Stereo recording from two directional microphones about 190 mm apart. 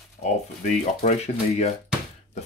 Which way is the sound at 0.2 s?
40° left (ahead or behind).